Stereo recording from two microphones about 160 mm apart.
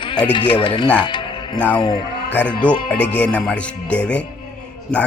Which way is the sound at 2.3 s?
10° left (ahead or behind).